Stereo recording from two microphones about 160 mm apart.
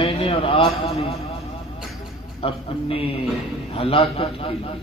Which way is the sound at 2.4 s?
35° left (ahead or behind).